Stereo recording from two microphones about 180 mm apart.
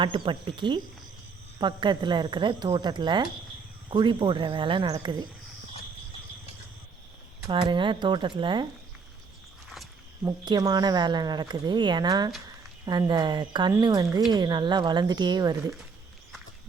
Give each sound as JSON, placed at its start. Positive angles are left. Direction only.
{"t": 0.0, "sound": "speech", "side_deg": -25}
{"t": 7.4, "sound": "speech", "side_deg": -25}
{"t": 9.6, "sound": "a sound", "side_deg": 0}
{"t": 10.2, "sound": "speech", "side_deg": -20}